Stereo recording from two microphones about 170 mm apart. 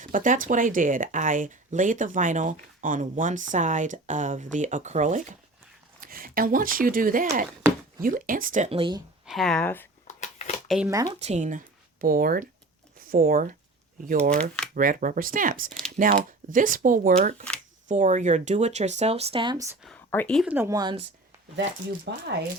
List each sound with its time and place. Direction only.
0.0 s speech: 50° right (ahead or behind)
6.0 s speech: 55° right (ahead or behind)
7.6 s a sound: 15° right (ahead or behind)
8.0 s speech: 55° right (ahead or behind)
8.7 s speech: 30° right (ahead or behind)
9.2 s speech: centre (ahead or behind)
10.1 s a sound: 40° left (ahead or behind)
10.8 s speech: 20° right (ahead or behind)
11.2 s speech: 45° right (ahead or behind)
14.8 s speech: 55° right (ahead or behind); by 19.6 s 30° right (ahead or behind)
20.1 s speech: 10° left (ahead or behind)
20.4 s speech: 10° right (ahead or behind)
21.5 s speech: 85° right